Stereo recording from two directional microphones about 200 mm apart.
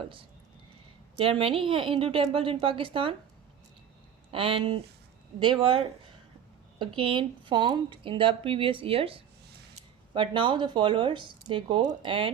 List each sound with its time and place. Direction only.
0.0 s speech: 25° right (ahead or behind)
4.3 s speech: 25° right (ahead or behind)